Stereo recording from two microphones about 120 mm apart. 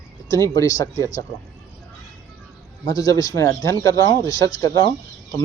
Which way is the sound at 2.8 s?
30° left (ahead or behind).